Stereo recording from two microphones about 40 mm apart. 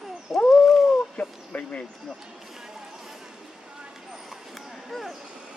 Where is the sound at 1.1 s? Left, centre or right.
Left.